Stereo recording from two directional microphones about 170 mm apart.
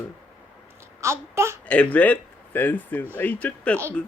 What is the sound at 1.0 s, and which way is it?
Speech, 15° right (ahead or behind).